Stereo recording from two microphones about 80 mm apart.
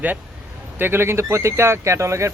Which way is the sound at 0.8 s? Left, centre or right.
Right.